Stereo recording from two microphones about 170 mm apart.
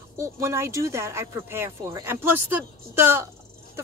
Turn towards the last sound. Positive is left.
turn(degrees=-15)  # may be behind; listen again after turning